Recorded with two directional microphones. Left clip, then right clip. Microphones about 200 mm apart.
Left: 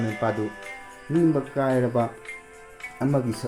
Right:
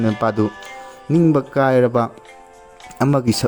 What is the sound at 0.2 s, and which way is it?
Speech, 55° right (ahead or behind).